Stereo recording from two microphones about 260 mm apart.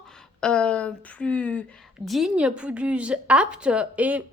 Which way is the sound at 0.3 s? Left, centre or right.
Centre.